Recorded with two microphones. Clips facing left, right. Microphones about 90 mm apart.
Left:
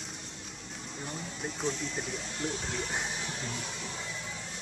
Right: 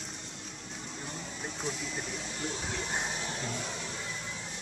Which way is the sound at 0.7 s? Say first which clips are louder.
Left 2 dB; centre (ahead or behind).